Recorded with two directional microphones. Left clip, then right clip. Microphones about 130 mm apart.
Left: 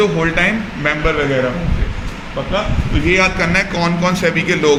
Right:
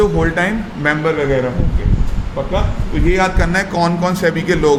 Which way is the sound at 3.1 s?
90° right.